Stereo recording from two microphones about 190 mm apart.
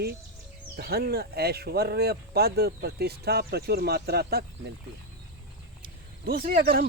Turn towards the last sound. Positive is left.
turn(degrees=-50)  # may be behind; listen again after turning